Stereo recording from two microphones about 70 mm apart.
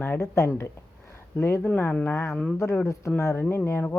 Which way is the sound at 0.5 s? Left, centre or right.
Left.